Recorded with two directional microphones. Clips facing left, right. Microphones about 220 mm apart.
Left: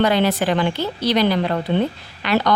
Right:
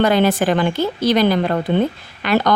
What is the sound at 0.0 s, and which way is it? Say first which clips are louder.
A woman's voice: right 3 dB; 50° right (ahead or behind).